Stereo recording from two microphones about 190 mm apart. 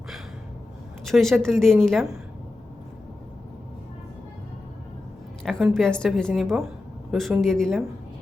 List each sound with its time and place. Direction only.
1.0 s a woman's voice: centre (ahead or behind)
5.5 s a woman's voice: centre (ahead or behind)